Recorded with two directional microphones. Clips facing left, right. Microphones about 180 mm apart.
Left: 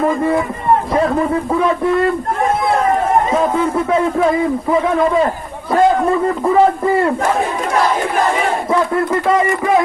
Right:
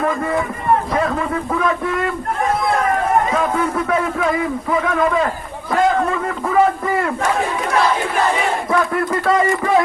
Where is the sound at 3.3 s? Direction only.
25° left (ahead or behind).